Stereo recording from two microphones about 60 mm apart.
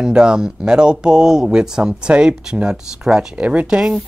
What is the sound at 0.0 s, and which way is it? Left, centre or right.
Speech, centre.